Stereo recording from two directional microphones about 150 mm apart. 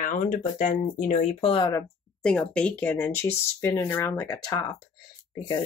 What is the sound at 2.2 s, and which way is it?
Speech, 5° left (ahead or behind).